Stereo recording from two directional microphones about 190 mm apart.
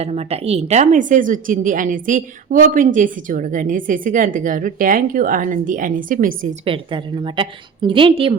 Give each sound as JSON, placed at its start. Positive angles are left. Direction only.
{"t": 0.0, "sound": "a woman's voice", "side_deg": -30}
{"t": 6.7, "sound": "a woman's voice", "side_deg": -25}